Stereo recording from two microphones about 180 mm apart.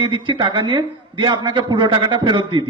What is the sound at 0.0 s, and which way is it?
A man's voice, 25° right (ahead or behind).